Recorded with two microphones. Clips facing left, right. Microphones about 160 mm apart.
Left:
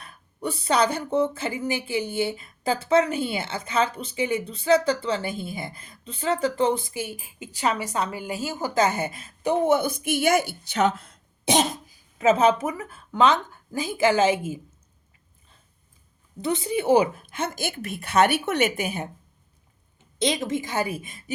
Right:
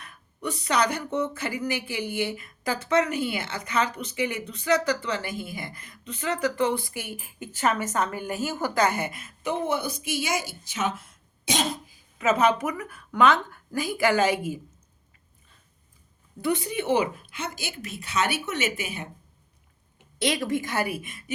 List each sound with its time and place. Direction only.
0.0 s speech: 30° left (ahead or behind); by 10.9 s 65° left (ahead or behind)
11.1 s throat clearing: 50° left (ahead or behind)
12.2 s speech: 30° left (ahead or behind)
16.4 s speech: 25° left (ahead or behind); by 19.0 s 50° left (ahead or behind)
20.1 s speech: 20° left (ahead or behind)